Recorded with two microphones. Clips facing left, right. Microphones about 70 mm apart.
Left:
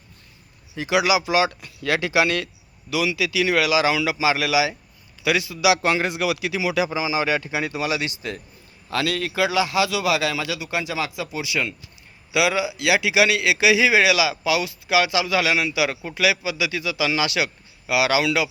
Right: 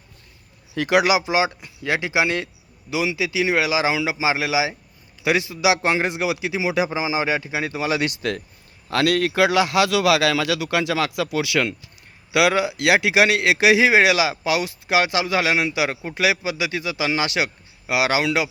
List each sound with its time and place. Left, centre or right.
0.8 s speech: right
1.2 s a man's voice: right
8.0 s speech: right
8.9 s a man's voice: right
12.3 s a man's voice: right